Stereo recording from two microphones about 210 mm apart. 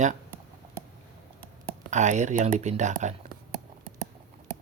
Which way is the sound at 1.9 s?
35° right (ahead or behind).